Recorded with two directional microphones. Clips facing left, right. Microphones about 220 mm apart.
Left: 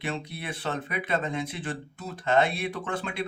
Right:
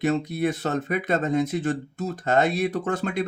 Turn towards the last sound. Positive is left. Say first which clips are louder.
# right 6 dB
turn(degrees=-45)  # may be behind; listen again after turning